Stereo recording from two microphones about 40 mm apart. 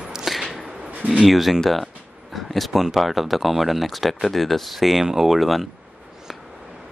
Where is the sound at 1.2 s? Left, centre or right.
Centre.